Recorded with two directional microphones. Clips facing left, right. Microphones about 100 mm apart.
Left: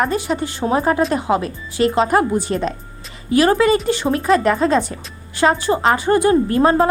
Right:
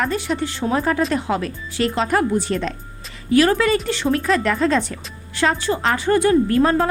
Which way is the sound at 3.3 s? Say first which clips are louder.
Left 2 dB; 25° left (ahead or behind).